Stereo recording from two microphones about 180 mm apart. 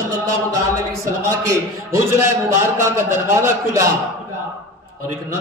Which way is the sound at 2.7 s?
15° right (ahead or behind).